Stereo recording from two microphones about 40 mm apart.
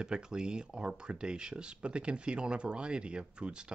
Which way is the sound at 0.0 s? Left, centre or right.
Centre.